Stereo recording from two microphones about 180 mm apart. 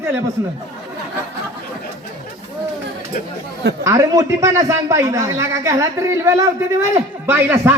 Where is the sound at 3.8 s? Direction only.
15° right (ahead or behind).